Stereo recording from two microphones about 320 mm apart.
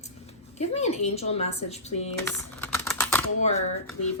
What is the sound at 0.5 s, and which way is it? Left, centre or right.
A woman's voice, centre.